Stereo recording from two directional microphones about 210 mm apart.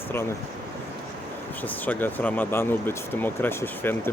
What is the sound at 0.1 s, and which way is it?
Speech, 10° left (ahead or behind).